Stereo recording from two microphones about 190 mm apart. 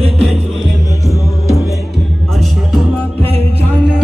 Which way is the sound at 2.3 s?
Centre (ahead or behind).